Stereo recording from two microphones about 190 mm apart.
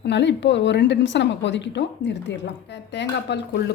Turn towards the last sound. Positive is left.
turn(degrees=65)  # may be behind; listen again after turning